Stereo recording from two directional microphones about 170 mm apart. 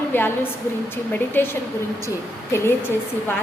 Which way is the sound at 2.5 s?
15° left (ahead or behind).